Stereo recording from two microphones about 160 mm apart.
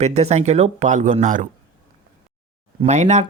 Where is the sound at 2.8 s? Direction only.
45° right (ahead or behind).